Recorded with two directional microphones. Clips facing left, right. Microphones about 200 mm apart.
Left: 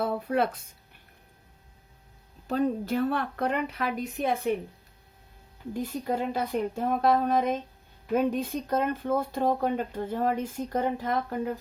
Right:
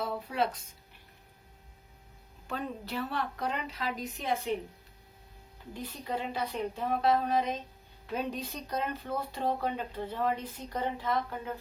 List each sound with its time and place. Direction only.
0.0 s speech: 55° left (ahead or behind)
2.5 s speech: 40° left (ahead or behind); by 4.5 s 55° left (ahead or behind)
5.7 s speech: 45° left (ahead or behind)